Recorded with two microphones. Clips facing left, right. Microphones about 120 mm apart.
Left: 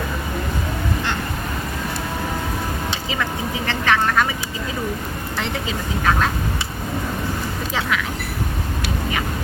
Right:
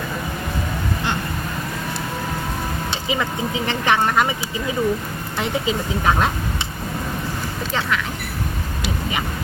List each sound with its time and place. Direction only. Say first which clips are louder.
3.7 s speech: even; 15° right (ahead or behind)
6.1 s speech: right 1 dB; 15° right (ahead or behind)
7.7 s speech: right 1 dB; 5° left (ahead or behind)